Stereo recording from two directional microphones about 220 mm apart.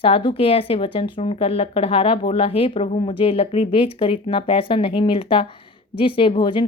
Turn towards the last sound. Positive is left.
turn(degrees=20)  # may be behind; listen again after turning